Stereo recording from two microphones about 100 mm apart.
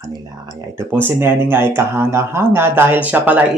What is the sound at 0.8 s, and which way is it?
Speech, 20° right (ahead or behind).